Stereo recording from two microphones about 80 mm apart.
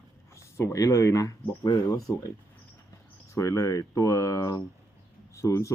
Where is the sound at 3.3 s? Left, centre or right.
Left.